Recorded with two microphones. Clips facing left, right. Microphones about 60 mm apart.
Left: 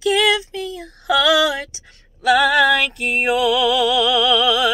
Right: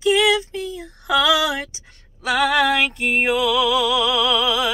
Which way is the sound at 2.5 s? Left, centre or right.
Right.